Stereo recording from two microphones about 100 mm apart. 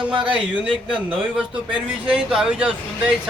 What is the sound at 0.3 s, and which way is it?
A man's voice, 10° right (ahead or behind).